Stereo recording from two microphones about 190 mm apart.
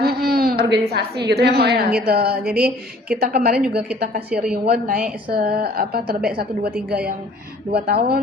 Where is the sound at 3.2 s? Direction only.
55° right (ahead or behind).